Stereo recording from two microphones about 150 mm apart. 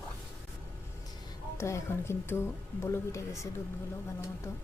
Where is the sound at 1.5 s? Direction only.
20° left (ahead or behind).